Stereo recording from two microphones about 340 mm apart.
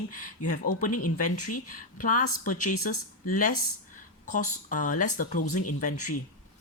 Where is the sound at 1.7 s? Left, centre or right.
Left.